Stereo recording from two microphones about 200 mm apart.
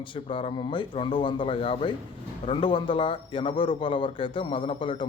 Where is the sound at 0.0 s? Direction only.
25° left (ahead or behind).